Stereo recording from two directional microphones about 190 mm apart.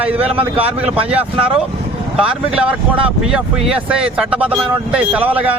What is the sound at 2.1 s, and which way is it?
A man's voice, 5° right (ahead or behind).